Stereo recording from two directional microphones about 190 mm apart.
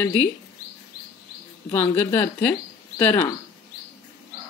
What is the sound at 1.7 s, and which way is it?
Speech, 10° left (ahead or behind).